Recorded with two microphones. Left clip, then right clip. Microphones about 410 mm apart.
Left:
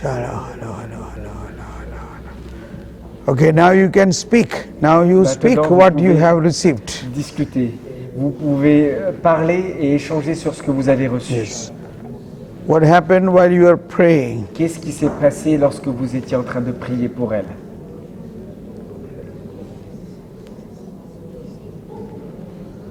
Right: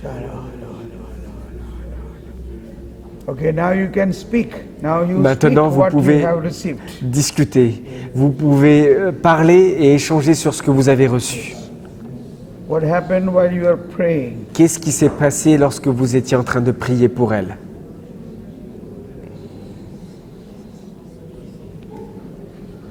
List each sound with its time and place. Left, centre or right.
0.0 s a sound: left
3.2 s a man's voice: left
5.3 s a woman's voice: right
5.8 s a man's voice: left
7.1 s a woman's voice: right
8.5 s a woman's voice: right
12.6 s a man's voice: left
14.5 s a woman's voice: right